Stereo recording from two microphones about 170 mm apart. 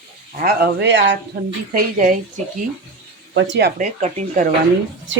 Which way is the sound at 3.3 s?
90° right.